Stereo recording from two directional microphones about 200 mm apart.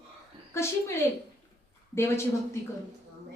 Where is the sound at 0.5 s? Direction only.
15° left (ahead or behind).